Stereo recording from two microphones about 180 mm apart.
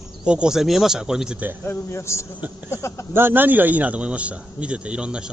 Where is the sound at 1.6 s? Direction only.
15° left (ahead or behind).